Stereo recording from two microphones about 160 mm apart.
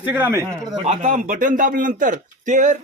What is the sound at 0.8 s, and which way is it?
A man's voice, 50° right (ahead or behind).